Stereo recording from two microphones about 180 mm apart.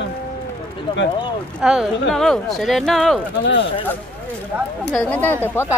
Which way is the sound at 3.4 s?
90° left.